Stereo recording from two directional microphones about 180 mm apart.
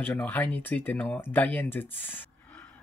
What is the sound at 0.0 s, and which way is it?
Speech, 10° left (ahead or behind).